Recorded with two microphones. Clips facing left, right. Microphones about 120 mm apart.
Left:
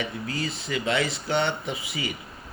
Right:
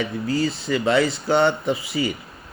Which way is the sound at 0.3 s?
35° right (ahead or behind).